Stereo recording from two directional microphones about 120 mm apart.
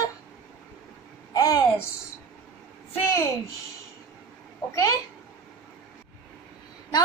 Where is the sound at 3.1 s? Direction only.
20° left (ahead or behind).